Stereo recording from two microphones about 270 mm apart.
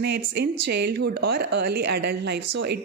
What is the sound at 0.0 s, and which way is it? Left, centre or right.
Speech, right.